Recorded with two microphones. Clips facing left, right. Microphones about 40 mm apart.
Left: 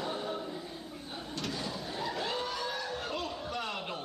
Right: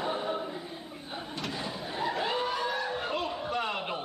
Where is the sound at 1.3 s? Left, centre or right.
Right.